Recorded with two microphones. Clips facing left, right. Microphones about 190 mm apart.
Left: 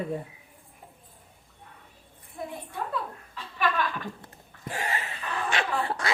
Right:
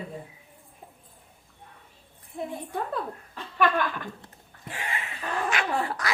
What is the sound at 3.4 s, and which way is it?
Chuckle, 50° right (ahead or behind).